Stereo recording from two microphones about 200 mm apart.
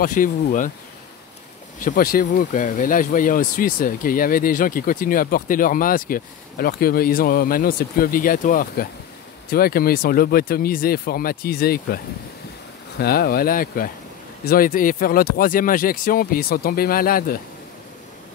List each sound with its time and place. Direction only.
0.0 s speech: 40° left (ahead or behind)
1.8 s speech: 45° left (ahead or behind)
13.0 s speech: 50° left (ahead or behind)